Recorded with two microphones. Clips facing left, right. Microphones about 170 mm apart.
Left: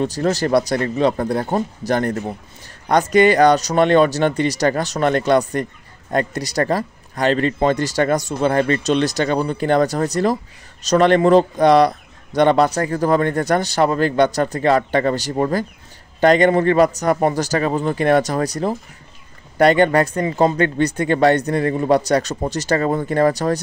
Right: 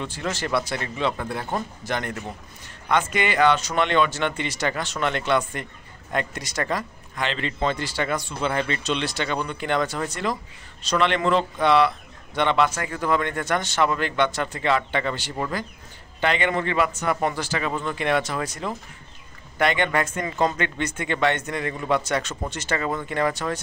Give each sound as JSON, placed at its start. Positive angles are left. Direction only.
{"t": 0.0, "sound": "speech", "side_deg": 40}